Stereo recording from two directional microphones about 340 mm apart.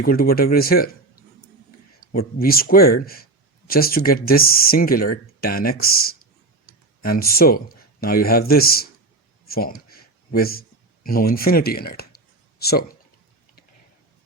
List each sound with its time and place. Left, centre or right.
0.0 s speech: left
2.1 s speech: left
7.0 s speech: left